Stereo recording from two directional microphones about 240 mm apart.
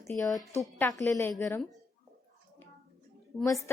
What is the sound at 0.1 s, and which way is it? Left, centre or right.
Speech, centre.